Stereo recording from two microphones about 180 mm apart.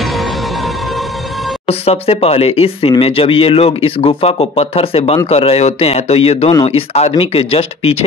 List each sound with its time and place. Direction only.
0.0 s music: centre (ahead or behind)
1.7 s speech: 35° left (ahead or behind)